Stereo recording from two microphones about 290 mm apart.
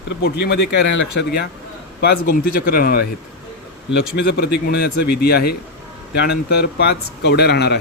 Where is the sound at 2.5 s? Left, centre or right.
Left.